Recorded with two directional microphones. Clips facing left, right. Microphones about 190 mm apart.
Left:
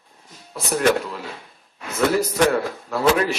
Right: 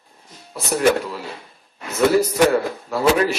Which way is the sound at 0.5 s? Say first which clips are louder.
Right 2 dB; centre (ahead or behind).